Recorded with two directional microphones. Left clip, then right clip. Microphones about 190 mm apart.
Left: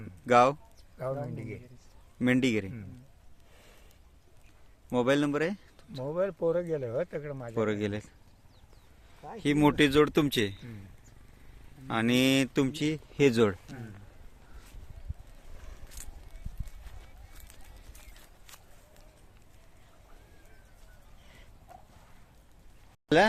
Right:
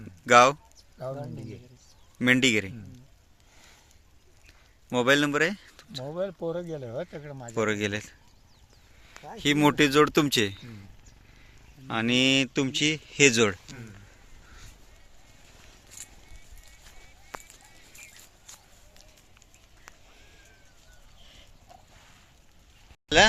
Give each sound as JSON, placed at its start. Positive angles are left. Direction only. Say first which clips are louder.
{"t": 0.3, "sound": "speech", "louder": "right 5 dB", "side_deg": 0}
{"t": 1.0, "sound": "speech", "louder": "left 1 dB", "side_deg": 15}
{"t": 2.1, "sound": "speech", "louder": "right 6 dB", "side_deg": 0}
{"t": 4.9, "sound": "speech", "louder": "right 4 dB", "side_deg": 0}
{"t": 6.1, "sound": "speech", "louder": "left 3 dB", "side_deg": 10}
{"t": 7.0, "sound": "speech", "louder": "left 3 dB", "side_deg": 35}
{"t": 7.5, "sound": "speech", "louder": "right 4 dB", "side_deg": 5}
{"t": 9.4, "sound": "speech", "louder": "right 3 dB", "side_deg": 0}
{"t": 11.9, "sound": "speech", "louder": "right 3 dB", "side_deg": 5}